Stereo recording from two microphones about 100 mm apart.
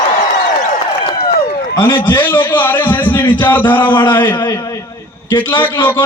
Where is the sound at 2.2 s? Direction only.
20° left (ahead or behind).